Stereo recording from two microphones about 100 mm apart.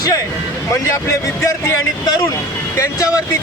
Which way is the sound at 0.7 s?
30° left (ahead or behind).